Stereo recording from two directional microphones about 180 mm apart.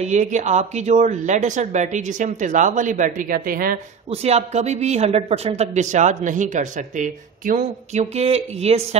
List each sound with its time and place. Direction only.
0.0 s speech: 40° right (ahead or behind)
4.1 s a man's voice: 35° right (ahead or behind)